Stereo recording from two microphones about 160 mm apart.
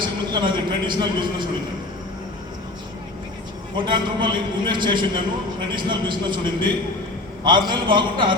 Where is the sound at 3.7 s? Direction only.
30° right (ahead or behind).